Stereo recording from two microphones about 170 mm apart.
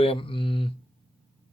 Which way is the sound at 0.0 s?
30° left (ahead or behind).